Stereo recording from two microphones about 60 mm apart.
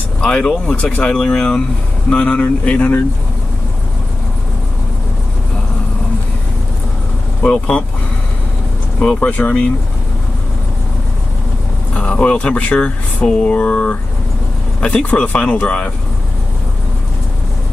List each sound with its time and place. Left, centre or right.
0.2 s speech: centre
2.0 s speech: left
7.4 s speech: centre
9.0 s speech: centre
11.9 s speech: centre